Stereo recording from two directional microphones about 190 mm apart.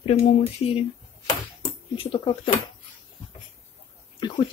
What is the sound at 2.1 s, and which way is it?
Speech, 25° left (ahead or behind).